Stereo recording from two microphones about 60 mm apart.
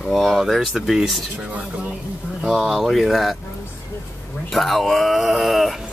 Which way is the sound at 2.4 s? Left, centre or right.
Centre.